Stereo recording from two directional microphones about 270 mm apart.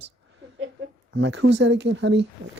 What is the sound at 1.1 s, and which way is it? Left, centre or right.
Speech, right.